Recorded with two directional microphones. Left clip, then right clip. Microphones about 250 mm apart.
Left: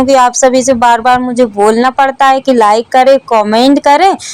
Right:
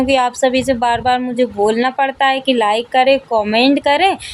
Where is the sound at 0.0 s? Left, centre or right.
Centre.